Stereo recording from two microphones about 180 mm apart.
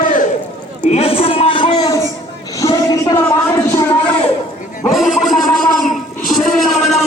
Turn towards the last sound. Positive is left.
turn(degrees=0)  # may be behind; listen again after turning